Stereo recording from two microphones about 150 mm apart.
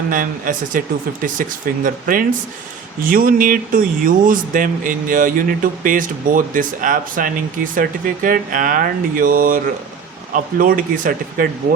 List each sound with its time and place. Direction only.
0.1 s speech: 65° right (ahead or behind)